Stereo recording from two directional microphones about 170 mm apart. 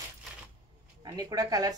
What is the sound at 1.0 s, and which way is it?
Speech, 20° right (ahead or behind).